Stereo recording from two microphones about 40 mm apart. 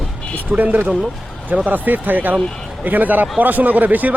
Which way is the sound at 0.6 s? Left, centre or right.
Right.